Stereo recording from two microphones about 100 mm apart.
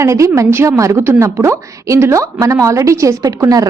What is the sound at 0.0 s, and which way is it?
A woman's voice, 30° right (ahead or behind).